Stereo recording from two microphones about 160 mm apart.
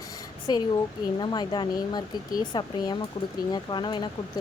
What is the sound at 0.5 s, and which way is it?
Speech, 25° left (ahead or behind).